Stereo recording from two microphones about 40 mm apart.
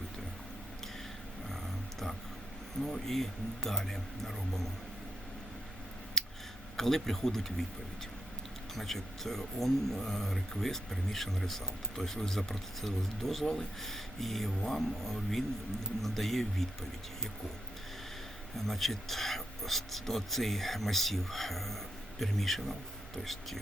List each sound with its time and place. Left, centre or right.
2.8 s speech: centre
6.2 s a sound: centre
6.7 s speech: centre
8.7 s speech: centre
13.4 s speech: centre
13.8 s speech: centre
18.5 s speech: centre